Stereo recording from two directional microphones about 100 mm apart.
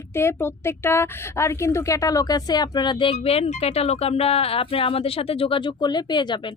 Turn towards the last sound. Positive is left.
turn(degrees=50)  # may be behind; listen again after turning